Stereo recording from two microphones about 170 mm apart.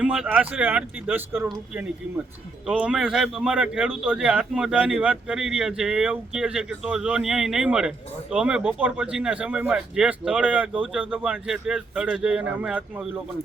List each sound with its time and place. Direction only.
0.0 s a man's voice: 5° right (ahead or behind)